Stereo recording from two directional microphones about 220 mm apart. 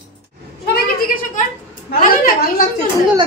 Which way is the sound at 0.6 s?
45° left (ahead or behind).